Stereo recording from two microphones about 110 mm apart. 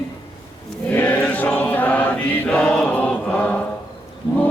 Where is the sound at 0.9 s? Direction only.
15° left (ahead or behind).